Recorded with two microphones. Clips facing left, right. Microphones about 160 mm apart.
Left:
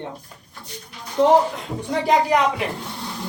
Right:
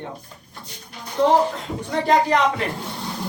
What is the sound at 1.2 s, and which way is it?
A woman's voice, 15° left (ahead or behind).